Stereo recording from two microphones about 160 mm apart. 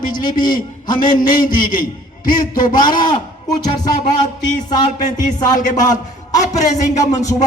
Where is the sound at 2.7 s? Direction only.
25° left (ahead or behind).